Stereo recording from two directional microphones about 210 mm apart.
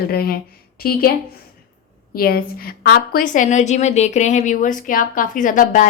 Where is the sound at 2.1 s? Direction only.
45° left (ahead or behind).